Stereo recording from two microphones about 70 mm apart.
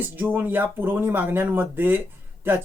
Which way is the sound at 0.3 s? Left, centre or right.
Right.